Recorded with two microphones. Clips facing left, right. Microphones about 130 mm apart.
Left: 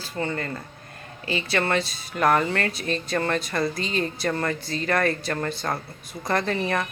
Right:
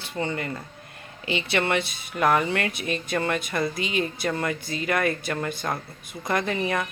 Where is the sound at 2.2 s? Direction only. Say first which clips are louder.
Left 1 dB; 10° right (ahead or behind).